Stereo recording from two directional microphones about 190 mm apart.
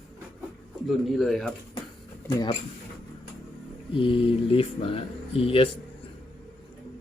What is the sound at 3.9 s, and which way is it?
Speech, 25° left (ahead or behind).